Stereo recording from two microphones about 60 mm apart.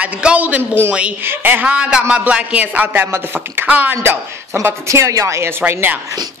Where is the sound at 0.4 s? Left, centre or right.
Right.